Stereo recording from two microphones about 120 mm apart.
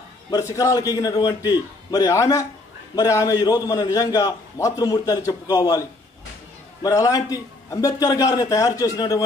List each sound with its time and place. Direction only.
0.4 s a man's voice: 25° left (ahead or behind)